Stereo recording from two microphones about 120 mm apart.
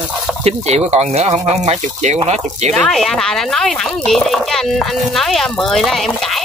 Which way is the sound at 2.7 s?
5° left (ahead or behind).